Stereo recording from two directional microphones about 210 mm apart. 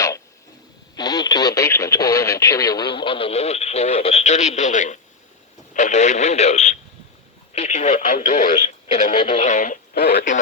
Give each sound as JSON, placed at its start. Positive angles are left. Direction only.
{"t": 0.9, "sound": "speech", "side_deg": 20}
{"t": 9.9, "sound": "speech", "side_deg": 50}